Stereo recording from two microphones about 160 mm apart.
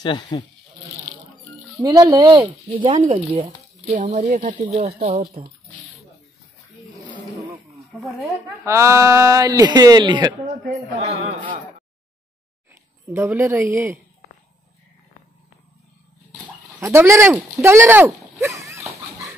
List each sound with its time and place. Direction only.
0.0 s speech: 25° left (ahead or behind)
1.8 s speech: 25° right (ahead or behind)
3.1 s speech: 40° right (ahead or behind)
3.9 s speech: 55° right (ahead or behind)
8.2 s speech: 15° right (ahead or behind)
10.4 s speech: 45° right (ahead or behind)
13.1 s speech: 15° right (ahead or behind)
16.8 s speech: 15° right (ahead or behind)
17.6 s dog: 15° right (ahead or behind)